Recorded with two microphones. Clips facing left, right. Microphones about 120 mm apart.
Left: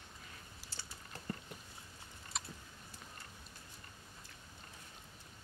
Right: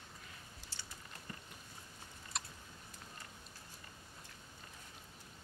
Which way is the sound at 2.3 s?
Centre (ahead or behind).